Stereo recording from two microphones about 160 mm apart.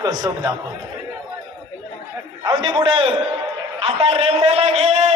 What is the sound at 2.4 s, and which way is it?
A man's voice, 30° right (ahead or behind).